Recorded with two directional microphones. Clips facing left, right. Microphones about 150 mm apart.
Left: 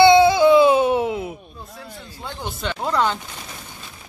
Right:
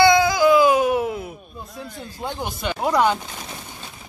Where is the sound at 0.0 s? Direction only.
25° left (ahead or behind).